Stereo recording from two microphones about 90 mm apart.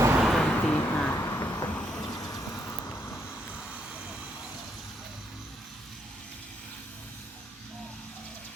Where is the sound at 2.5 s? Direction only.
30° left (ahead or behind).